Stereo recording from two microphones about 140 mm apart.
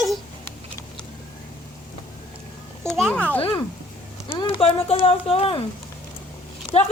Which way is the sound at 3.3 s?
40° left (ahead or behind).